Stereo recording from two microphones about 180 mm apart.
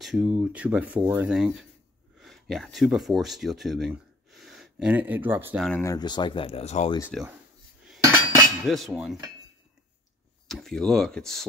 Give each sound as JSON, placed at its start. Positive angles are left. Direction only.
{"t": 0.0, "sound": "speech", "side_deg": 0}
{"t": 5.6, "sound": "speech", "side_deg": 5}
{"t": 5.9, "sound": "speech", "side_deg": 25}
{"t": 7.1, "sound": "speech", "side_deg": 5}
{"t": 7.8, "sound": "cutlery", "side_deg": -5}
{"t": 8.6, "sound": "speech", "side_deg": 0}
{"t": 10.5, "sound": "speech", "side_deg": 0}